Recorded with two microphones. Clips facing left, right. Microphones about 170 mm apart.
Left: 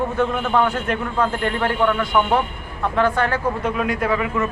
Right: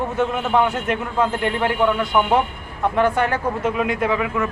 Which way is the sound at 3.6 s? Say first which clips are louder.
Right 1 dB; 10° right (ahead or behind).